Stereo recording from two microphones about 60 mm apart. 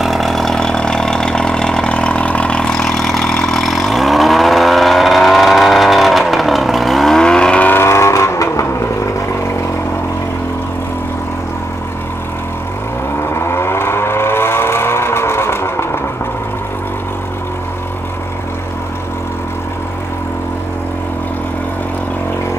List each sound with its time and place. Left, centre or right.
0.0 s vehicle: centre
7.8 s vehicle: left
13.2 s vehicle: left